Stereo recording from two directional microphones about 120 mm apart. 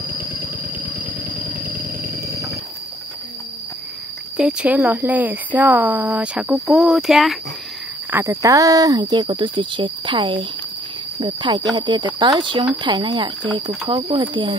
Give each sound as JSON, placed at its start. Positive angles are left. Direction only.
{"t": 0.1, "sound": "vehicle", "side_deg": -15}
{"t": 4.4, "sound": "speech", "side_deg": -10}
{"t": 8.1, "sound": "speech", "side_deg": -20}